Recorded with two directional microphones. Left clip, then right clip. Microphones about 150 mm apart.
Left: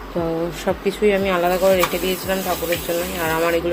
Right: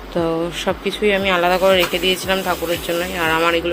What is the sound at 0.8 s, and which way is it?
Speech, 10° left (ahead or behind).